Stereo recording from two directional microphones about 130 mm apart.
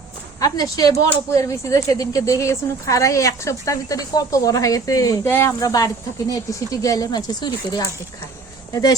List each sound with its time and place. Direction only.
0.3 s speech: 30° left (ahead or behind)